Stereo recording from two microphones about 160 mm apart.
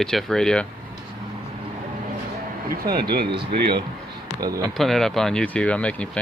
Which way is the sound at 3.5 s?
90° right.